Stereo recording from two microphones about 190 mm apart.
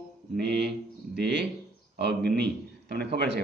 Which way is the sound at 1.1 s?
60° right (ahead or behind).